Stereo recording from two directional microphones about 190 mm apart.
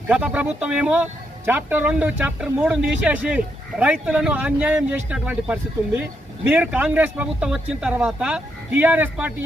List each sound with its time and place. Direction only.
0.1 s speech: 5° right (ahead or behind)